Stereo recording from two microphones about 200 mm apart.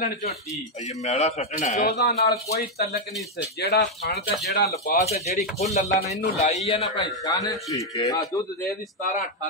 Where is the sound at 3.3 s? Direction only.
55° left (ahead or behind).